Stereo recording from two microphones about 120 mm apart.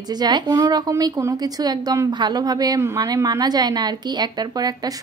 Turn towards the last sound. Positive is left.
turn(degrees=-35)  # may be behind; listen again after turning